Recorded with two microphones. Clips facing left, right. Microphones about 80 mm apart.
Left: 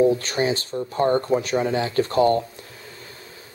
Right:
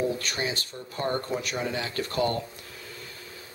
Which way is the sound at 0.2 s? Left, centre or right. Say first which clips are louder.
Left 8 dB; left.